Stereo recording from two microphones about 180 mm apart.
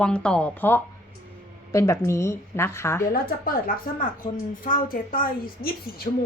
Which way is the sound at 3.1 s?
50° left (ahead or behind).